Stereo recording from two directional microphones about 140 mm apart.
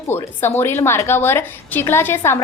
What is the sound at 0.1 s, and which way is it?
A woman's voice, 15° left (ahead or behind).